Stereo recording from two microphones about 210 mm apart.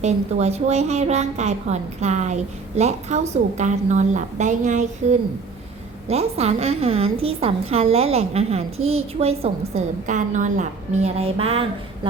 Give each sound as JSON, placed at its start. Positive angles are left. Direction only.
{"t": 0.0, "sound": "a woman's voice", "side_deg": -30}
{"t": 6.1, "sound": "a woman's voice", "side_deg": -30}